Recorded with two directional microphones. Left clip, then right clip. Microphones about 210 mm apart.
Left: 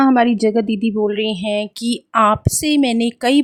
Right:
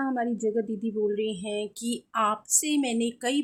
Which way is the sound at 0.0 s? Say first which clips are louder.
Left 14 dB; 50° left (ahead or behind).